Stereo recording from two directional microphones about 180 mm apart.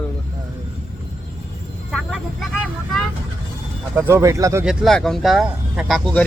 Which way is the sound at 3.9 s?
15° right (ahead or behind).